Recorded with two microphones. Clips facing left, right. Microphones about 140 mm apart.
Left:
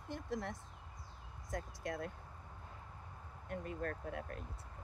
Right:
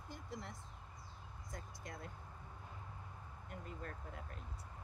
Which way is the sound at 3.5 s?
60° left (ahead or behind).